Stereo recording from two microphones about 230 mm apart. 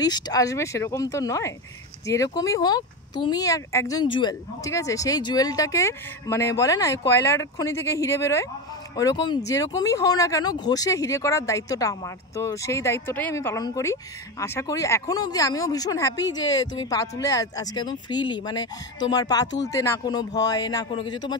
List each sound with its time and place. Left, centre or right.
0.0 s speech: centre